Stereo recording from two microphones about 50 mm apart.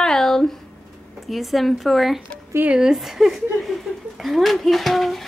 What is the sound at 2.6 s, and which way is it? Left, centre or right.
Speech, right.